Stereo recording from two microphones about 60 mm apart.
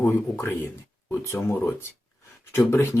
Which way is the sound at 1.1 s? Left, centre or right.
Left.